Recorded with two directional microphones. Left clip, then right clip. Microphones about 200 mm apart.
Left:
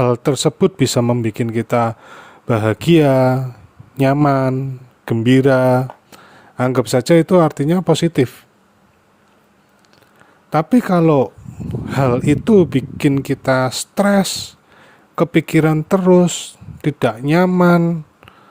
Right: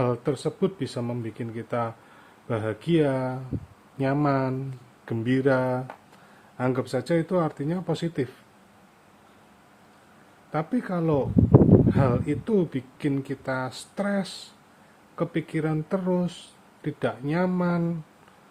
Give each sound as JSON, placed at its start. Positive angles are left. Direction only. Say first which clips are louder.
{"t": 0.0, "sound": "speech", "louder": "left 11 dB", "side_deg": 55}
{"t": 10.5, "sound": "speech", "louder": "left 13 dB", "side_deg": 55}